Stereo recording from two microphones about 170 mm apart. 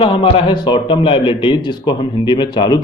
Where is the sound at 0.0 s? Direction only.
30° left (ahead or behind).